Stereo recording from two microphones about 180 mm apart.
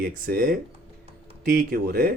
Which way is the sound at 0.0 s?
55° right (ahead or behind).